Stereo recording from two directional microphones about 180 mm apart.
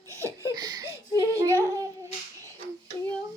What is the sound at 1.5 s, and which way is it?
Babbling, 20° right (ahead or behind).